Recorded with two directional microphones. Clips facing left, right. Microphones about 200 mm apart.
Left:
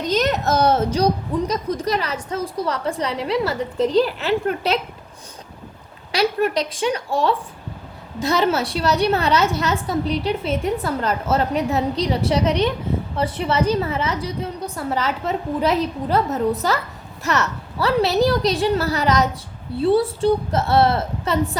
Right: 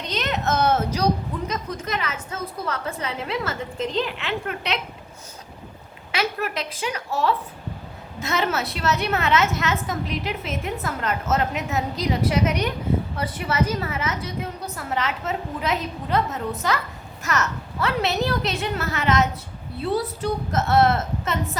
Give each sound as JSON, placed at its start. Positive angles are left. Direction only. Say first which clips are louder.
{"t": 0.0, "sound": "a woman's voice", "louder": "left 6 dB", "side_deg": 40}
{"t": 6.1, "sound": "a woman's voice", "louder": "left 7 dB", "side_deg": 35}